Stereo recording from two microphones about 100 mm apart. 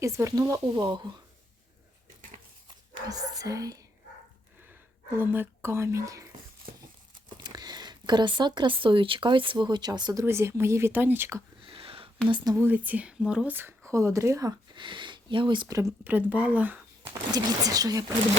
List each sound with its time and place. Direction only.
0.0 s speech: 30° right (ahead or behind); by 1.1 s 50° right (ahead or behind)
3.1 s speech: 40° right (ahead or behind)
4.7 s speech: 20° right (ahead or behind)
7.4 s speech: 45° right (ahead or behind)
10.2 s speech: 25° right (ahead or behind)
11.6 s a sound: 65° right (ahead or behind)
12.5 s speech: 20° right (ahead or behind)
14.8 s speech: 55° right (ahead or behind)
15.6 s speech: 35° right (ahead or behind)
16.0 s speech: 15° right (ahead or behind)
17.3 s speech: 40° right (ahead or behind)